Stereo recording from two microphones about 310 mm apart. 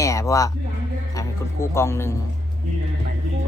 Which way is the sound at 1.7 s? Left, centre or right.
Centre.